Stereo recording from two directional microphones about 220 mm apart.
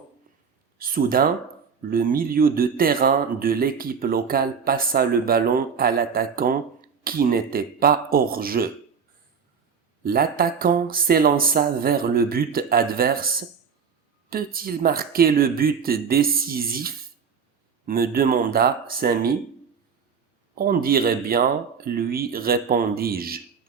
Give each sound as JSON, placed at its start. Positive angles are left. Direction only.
{"t": 0.8, "sound": "speech", "side_deg": -40}
{"t": 10.0, "sound": "speech", "side_deg": -40}
{"t": 20.6, "sound": "speech", "side_deg": -40}